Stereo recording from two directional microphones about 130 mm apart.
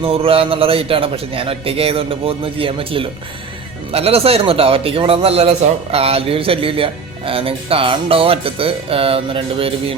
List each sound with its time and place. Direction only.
0.0 s a man's voice: 45° right (ahead or behind)